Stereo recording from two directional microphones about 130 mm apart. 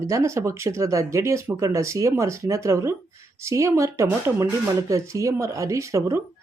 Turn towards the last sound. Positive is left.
turn(degrees=-25)  # may be behind; listen again after turning